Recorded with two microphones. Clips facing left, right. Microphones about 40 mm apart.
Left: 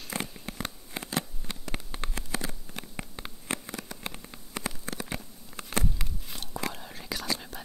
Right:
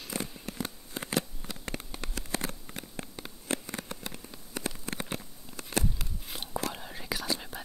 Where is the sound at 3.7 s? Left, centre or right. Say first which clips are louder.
Right 1 dB; right.